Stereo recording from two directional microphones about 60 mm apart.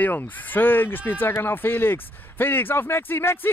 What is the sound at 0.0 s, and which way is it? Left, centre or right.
Speech, left.